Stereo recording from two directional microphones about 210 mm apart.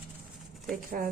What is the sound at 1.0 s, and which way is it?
Speech, 40° right (ahead or behind).